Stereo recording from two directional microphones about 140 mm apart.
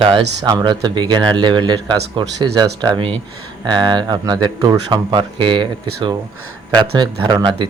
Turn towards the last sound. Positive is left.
turn(degrees=-35)  # may be behind; listen again after turning